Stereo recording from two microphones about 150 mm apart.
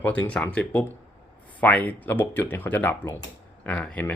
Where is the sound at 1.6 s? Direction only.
10° left (ahead or behind).